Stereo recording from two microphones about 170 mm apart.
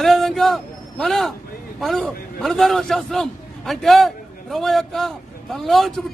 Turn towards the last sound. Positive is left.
turn(degrees=0)  # may be behind; listen again after turning